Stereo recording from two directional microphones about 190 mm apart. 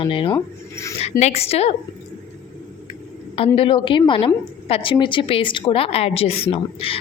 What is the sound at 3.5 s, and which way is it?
A woman's voice, 25° left (ahead or behind).